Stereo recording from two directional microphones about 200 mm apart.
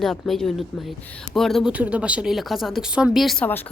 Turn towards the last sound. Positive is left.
turn(degrees=5)  # may be behind; listen again after turning